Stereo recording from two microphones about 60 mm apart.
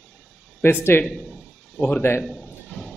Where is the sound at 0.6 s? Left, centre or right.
Left.